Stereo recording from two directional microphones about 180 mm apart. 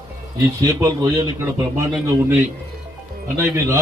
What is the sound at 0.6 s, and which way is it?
A man's voice, 20° right (ahead or behind).